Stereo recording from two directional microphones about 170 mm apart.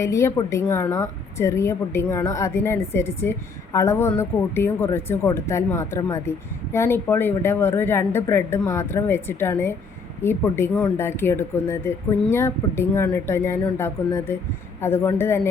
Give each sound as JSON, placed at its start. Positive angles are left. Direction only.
{"t": 0.0, "sound": "a woman's voice", "side_deg": 15}